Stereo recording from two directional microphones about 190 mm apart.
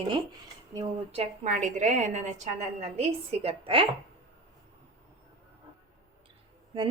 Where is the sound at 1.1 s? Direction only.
35° right (ahead or behind).